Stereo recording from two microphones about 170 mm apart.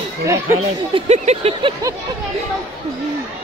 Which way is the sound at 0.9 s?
40° right (ahead or behind).